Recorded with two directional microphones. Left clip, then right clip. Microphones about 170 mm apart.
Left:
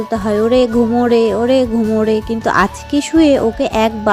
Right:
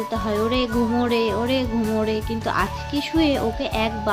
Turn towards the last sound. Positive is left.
turn(degrees=45)  # may be behind; listen again after turning